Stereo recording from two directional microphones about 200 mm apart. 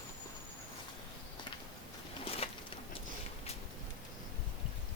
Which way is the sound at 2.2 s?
30° left (ahead or behind).